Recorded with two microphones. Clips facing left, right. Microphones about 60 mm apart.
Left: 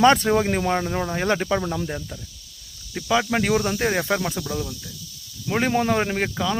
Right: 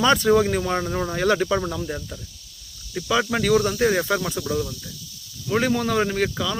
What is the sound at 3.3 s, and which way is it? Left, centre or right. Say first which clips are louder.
Speech: right 2 dB; left.